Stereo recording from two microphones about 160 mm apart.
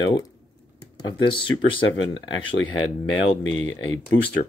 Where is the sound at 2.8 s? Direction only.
30° left (ahead or behind).